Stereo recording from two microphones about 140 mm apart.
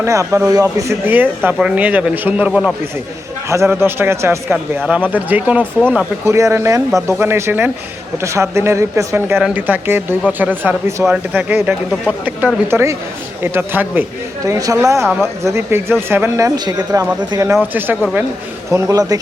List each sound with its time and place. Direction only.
0.0 s speech: 20° right (ahead or behind)
3.5 s speech: 20° right (ahead or behind)
16.6 s speech: 25° right (ahead or behind)